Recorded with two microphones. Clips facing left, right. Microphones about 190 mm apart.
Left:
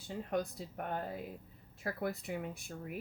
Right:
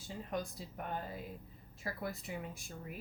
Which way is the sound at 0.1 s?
60° left (ahead or behind).